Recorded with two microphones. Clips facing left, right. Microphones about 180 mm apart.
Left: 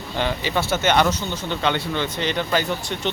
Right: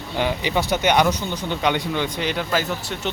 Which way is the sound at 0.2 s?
10° right (ahead or behind).